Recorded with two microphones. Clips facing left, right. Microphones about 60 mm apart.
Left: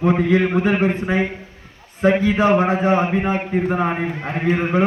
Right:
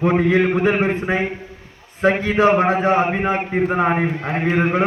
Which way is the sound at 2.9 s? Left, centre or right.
Right.